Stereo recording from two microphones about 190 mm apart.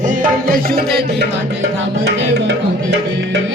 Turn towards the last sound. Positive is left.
turn(degrees=-70)  # may be behind; listen again after turning